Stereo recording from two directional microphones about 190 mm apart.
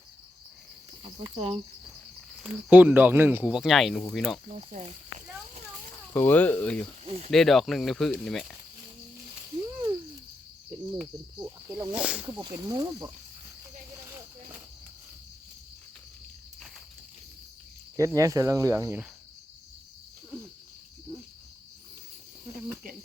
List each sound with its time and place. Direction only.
1.0 s cricket: 30° right (ahead or behind)
2.4 s speech: 10° right (ahead or behind)
4.5 s cricket: 35° right (ahead or behind)
6.1 s speech: 10° left (ahead or behind)
7.0 s speech: 35° right (ahead or behind)
7.3 s speech: centre (ahead or behind)
10.9 s speech: 10° right (ahead or behind)
12.4 s speech: 20° right (ahead or behind)
17.9 s speech: 15° right (ahead or behind)